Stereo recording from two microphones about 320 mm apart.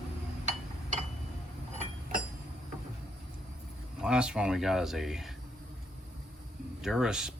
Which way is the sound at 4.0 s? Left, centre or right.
Centre.